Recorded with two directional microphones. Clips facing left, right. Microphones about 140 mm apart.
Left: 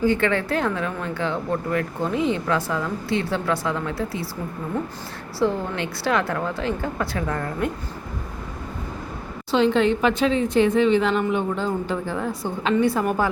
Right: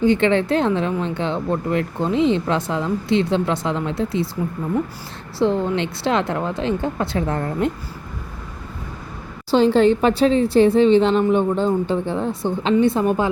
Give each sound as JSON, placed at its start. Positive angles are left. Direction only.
{"t": 0.0, "sound": "speech", "side_deg": -20}
{"t": 5.4, "sound": "speech", "side_deg": -25}
{"t": 9.5, "sound": "speech", "side_deg": -35}